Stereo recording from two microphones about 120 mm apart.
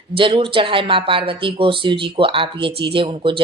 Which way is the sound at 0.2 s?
45° right (ahead or behind).